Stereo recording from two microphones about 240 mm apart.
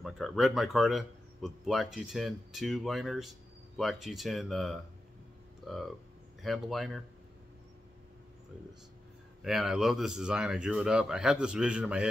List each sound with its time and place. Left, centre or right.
0.0 s speech: centre
9.4 s speech: centre